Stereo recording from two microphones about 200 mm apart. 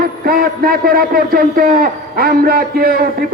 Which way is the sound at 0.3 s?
45° right (ahead or behind).